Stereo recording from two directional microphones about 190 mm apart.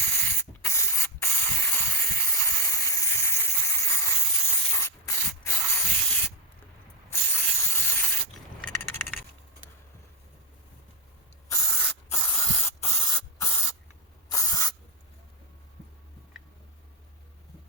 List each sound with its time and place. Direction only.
0.0 s spray: 10° left (ahead or behind)
7.1 s a sound: 10° left (ahead or behind)
11.4 s spray: 15° left (ahead or behind)